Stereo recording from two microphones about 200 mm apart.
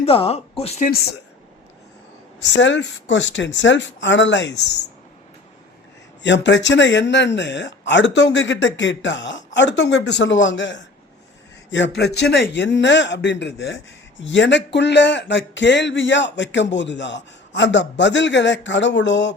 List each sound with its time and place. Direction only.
0.0 s speech: 30° left (ahead or behind)
2.4 s speech: 65° left (ahead or behind)
6.2 s speech: 65° left (ahead or behind)
11.9 s speech: 55° left (ahead or behind)